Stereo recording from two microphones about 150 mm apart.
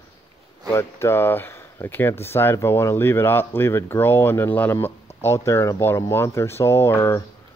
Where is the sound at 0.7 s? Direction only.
15° left (ahead or behind).